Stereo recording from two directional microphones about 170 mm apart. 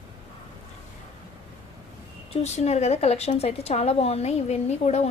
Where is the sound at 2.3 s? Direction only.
40° left (ahead or behind).